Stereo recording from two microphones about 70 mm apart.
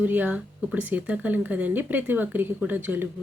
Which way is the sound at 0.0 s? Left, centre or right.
Right.